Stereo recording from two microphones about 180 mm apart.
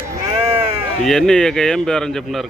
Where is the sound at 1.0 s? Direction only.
5° left (ahead or behind).